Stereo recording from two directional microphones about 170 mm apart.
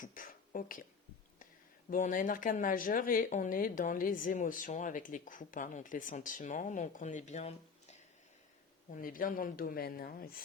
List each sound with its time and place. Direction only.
0.0 s speech: 55° left (ahead or behind)
1.9 s speech: 50° left (ahead or behind)
8.9 s speech: 55° left (ahead or behind)